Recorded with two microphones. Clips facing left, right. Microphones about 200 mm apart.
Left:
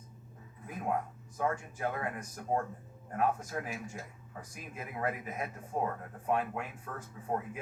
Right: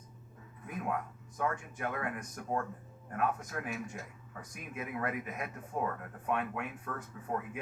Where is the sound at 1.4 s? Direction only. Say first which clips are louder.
Left 2 dB; 30° left (ahead or behind).